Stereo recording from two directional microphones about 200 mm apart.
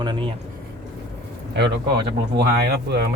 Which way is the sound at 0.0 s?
25° right (ahead or behind).